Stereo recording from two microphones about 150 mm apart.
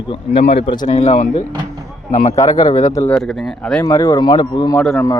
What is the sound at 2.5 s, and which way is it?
Speech, 25° left (ahead or behind).